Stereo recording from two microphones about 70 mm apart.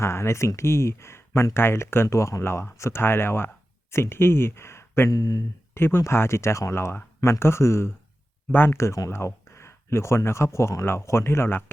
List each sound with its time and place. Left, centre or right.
0.0 s speech: left
5.1 s speech: left
5.7 s speech: left
8.5 s speech: left
9.0 s speech: left